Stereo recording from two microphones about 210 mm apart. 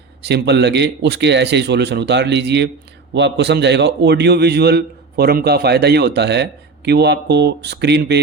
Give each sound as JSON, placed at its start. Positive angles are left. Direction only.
{"t": 0.2, "sound": "a man's voice", "side_deg": -50}